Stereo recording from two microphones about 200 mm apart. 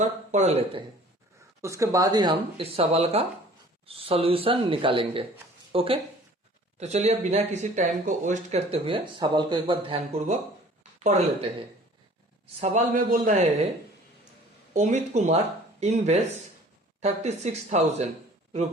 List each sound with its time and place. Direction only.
0.0 s speech: 35° right (ahead or behind)
1.6 s speech: 15° right (ahead or behind); by 11.4 s 35° right (ahead or behind)
12.5 s speech: 35° right (ahead or behind)
14.7 s speech: 35° right (ahead or behind)